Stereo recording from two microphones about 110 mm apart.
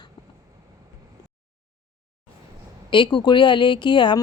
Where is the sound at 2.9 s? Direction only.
45° left (ahead or behind).